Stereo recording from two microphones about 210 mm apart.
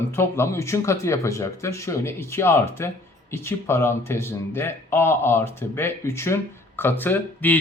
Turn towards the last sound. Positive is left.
turn(degrees=10)  # may be behind; listen again after turning